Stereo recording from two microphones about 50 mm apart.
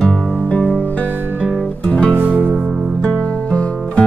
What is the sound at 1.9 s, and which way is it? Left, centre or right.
Music, left.